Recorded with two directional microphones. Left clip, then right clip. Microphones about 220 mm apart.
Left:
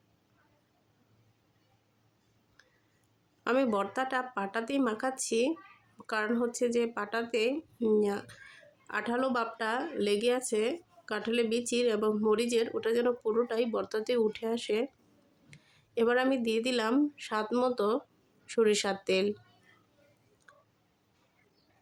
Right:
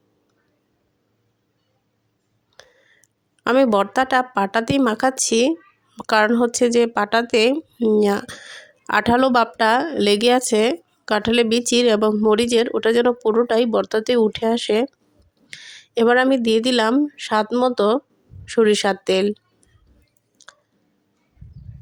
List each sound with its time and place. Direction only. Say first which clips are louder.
2.6 s whispering: right 16 dB; 35° right (ahead or behind)
3.4 s speech: right 13 dB; 35° right (ahead or behind)
20.4 s a sound: right 14 dB; 35° right (ahead or behind)